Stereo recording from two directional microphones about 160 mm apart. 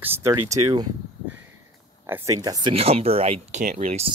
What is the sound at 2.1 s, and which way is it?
Speech, 20° right (ahead or behind).